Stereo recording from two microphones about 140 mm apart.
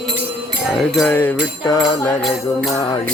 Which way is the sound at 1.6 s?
25° left (ahead or behind).